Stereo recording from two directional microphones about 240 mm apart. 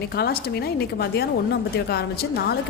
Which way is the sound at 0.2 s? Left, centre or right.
Left.